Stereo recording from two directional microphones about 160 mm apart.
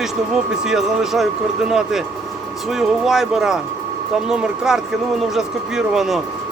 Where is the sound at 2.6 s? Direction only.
Centre (ahead or behind).